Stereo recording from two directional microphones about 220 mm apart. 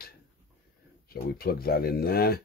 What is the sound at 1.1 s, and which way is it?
Speech, 45° left (ahead or behind).